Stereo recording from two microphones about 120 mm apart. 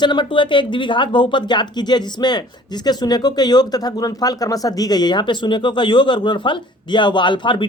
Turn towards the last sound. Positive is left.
turn(degrees=40)  # may be behind; listen again after turning